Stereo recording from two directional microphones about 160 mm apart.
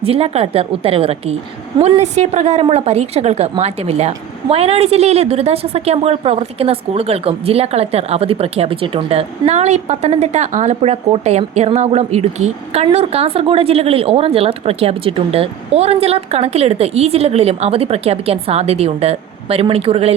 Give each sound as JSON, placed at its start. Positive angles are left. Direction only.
{"t": 0.0, "sound": "a woman's voice", "side_deg": -40}